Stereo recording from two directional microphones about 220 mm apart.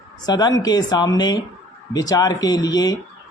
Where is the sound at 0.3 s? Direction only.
20° left (ahead or behind).